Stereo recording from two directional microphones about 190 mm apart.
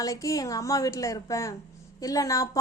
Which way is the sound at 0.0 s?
15° left (ahead or behind).